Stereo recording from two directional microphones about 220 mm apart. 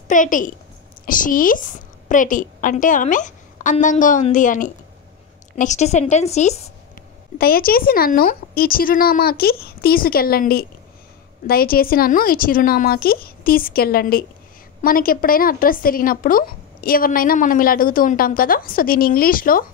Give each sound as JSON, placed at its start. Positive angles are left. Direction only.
{"t": 0.1, "sound": "speech", "side_deg": 35}
{"t": 7.3, "sound": "speech", "side_deg": 40}